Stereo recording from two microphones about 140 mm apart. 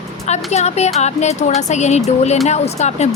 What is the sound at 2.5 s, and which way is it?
Music, 50° left (ahead or behind).